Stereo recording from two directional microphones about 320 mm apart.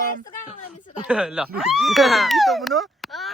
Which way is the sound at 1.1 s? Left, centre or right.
Centre.